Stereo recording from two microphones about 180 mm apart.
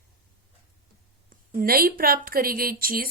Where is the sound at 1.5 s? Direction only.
55° right (ahead or behind).